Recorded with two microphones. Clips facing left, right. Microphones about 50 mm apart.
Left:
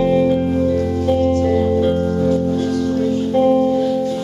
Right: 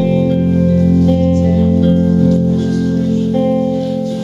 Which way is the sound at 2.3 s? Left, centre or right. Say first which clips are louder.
Right 3 dB; left.